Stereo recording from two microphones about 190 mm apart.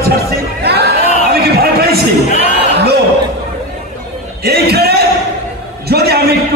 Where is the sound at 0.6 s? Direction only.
60° right (ahead or behind).